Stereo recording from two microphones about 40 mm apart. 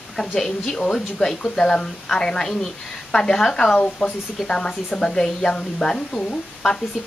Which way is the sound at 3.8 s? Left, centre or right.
Left.